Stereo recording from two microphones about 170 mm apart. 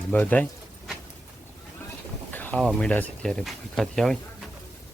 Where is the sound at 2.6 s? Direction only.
Centre (ahead or behind).